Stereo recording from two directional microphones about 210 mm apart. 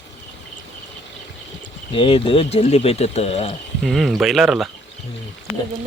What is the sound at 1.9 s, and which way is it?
Speech, 25° left (ahead or behind).